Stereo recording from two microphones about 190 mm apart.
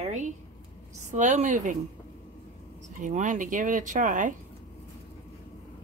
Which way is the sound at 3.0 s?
40° right (ahead or behind).